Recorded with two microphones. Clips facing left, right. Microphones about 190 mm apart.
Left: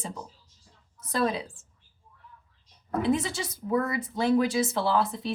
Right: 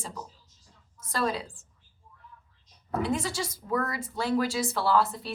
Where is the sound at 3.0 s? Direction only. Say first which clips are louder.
Left 5 dB; 20° left (ahead or behind).